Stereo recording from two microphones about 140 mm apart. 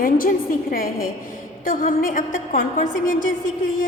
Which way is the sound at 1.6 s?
80° left.